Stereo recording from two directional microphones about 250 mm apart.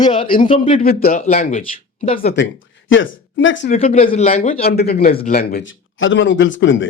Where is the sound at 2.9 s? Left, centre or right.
Left.